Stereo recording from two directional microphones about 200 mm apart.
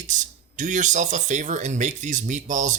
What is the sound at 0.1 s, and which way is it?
Speech, 40° right (ahead or behind).